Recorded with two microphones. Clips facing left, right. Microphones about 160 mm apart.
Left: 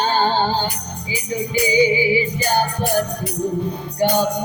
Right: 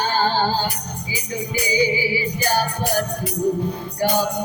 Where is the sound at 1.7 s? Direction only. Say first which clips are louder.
Left 4 dB; 20° left (ahead or behind).